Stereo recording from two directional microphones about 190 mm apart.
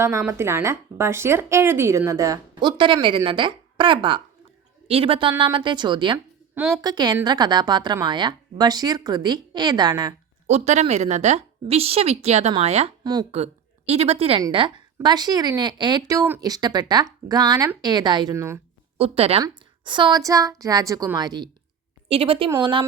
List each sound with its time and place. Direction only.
0.0 s speech: 15° right (ahead or behind)
6.5 s a sound: 5° right (ahead or behind)
6.8 s speech: 20° right (ahead or behind)
10.4 s a woman's voice: 35° right (ahead or behind); by 18.6 s 15° right (ahead or behind)
18.9 s a woman's voice: 30° right (ahead or behind)